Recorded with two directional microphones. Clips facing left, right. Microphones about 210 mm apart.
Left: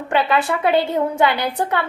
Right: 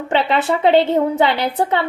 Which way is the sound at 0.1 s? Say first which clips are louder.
Right 1 dB; 25° right (ahead or behind).